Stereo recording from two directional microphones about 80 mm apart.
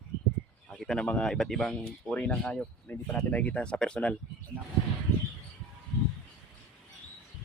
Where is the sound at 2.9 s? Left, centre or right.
Left.